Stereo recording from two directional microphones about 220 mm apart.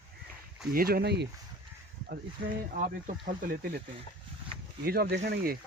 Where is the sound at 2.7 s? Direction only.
35° right (ahead or behind).